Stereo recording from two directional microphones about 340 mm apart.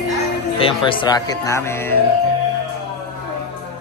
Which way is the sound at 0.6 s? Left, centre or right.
Centre.